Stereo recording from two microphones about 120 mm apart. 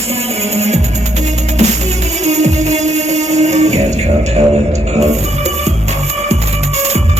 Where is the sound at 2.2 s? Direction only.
70° right (ahead or behind).